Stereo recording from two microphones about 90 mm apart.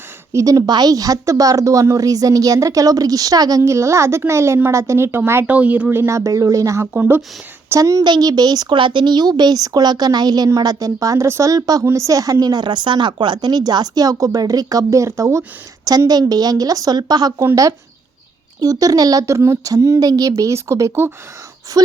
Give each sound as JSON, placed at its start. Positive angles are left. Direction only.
{"t": 0.3, "sound": "a woman's voice", "side_deg": -40}
{"t": 3.6, "sound": "a woman's voice", "side_deg": -35}
{"t": 5.5, "sound": "speech", "side_deg": -15}
{"t": 6.0, "sound": "a woman's voice", "side_deg": -35}
{"t": 6.9, "sound": "speech", "side_deg": -20}
{"t": 7.8, "sound": "a woman's voice", "side_deg": -40}
{"t": 8.0, "sound": "speech", "side_deg": -50}
{"t": 17.4, "sound": "a woman's voice", "side_deg": -40}